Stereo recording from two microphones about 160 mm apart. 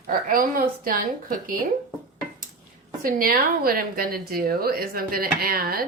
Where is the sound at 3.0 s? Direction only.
60° right (ahead or behind).